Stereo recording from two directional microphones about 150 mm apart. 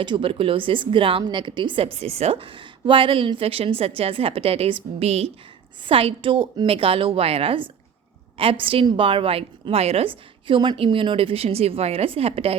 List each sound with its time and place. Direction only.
0.0 s a woman's voice: 35° right (ahead or behind)